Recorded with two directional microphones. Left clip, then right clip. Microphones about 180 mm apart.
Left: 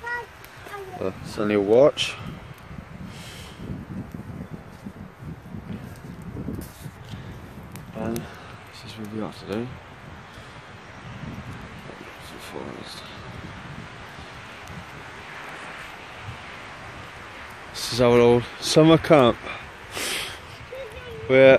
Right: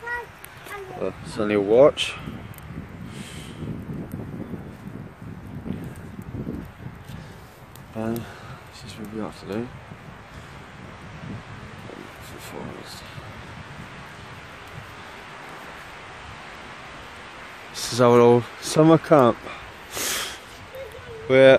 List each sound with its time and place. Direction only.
0.9 s speech: 15° left (ahead or behind)
8.0 s a sound: 10° right (ahead or behind)
8.9 s speech: 5° right (ahead or behind)
17.7 s speech: 10° right (ahead or behind)
19.9 s snort: 20° right (ahead or behind)
21.3 s speech: 20° right (ahead or behind)